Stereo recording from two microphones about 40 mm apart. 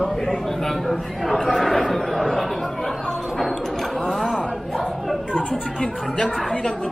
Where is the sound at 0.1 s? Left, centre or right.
Centre.